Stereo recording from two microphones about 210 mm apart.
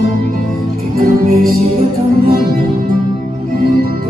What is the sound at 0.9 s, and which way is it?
Music, 45° right (ahead or behind).